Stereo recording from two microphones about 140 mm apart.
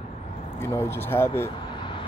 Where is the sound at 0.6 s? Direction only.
15° left (ahead or behind).